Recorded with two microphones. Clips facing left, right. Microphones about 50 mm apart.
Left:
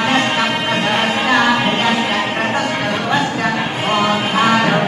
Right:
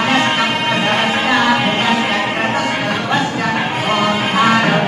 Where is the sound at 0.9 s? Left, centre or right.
Centre.